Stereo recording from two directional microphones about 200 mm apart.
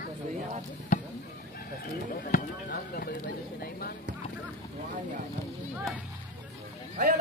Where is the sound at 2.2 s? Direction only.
45° left (ahead or behind).